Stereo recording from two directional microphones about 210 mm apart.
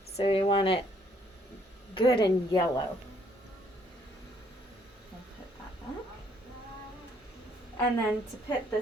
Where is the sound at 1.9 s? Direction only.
25° left (ahead or behind).